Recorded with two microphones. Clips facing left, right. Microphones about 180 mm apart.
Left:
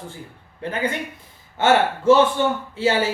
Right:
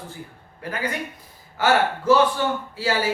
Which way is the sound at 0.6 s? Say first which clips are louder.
Left 3 dB; 25° left (ahead or behind).